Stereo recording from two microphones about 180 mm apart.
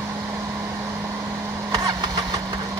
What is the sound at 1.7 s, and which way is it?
Vehicle, 20° right (ahead or behind).